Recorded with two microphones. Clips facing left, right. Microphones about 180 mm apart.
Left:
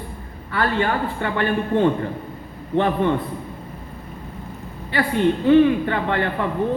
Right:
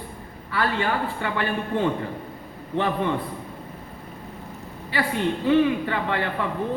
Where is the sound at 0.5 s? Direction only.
55° left (ahead or behind).